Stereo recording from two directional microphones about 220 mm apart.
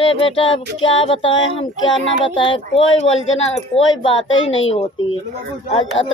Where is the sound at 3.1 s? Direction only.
60° left (ahead or behind).